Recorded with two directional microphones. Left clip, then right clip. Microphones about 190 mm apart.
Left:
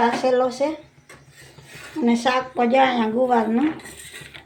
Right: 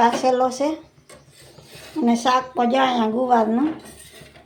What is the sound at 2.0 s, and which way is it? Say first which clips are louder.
Speech: right 2 dB; 5° right (ahead or behind).